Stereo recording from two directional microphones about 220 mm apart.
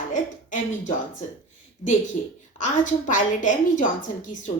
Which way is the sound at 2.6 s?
35° left (ahead or behind).